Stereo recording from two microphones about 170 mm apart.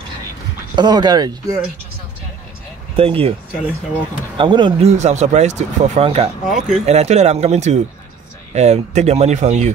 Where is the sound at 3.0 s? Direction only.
35° right (ahead or behind).